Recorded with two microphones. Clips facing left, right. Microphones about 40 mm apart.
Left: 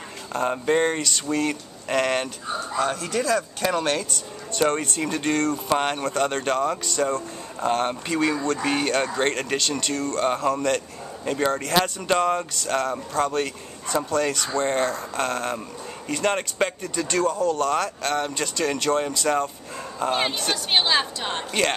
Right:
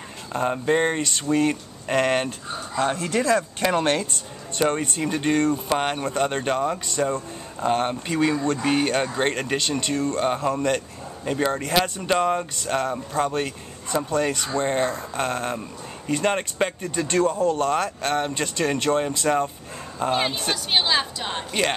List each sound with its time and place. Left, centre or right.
0.3 s speech: centre
1.0 s speech: right
2.8 s speech: right
4.6 s a woman's voice: centre
20.0 s a woman's voice: centre